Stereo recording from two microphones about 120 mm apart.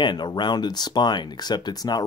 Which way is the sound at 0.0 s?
40° left (ahead or behind).